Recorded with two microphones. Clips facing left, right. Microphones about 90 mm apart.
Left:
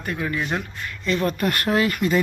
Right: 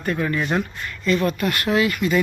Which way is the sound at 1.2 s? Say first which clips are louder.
Right 1 dB; 40° left (ahead or behind).